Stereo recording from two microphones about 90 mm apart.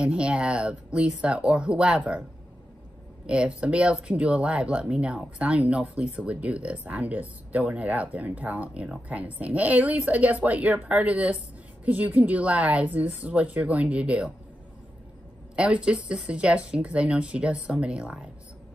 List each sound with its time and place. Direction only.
0.0 s speech: 10° right (ahead or behind)
3.3 s speech: 10° right (ahead or behind)
15.5 s speech: 10° right (ahead or behind)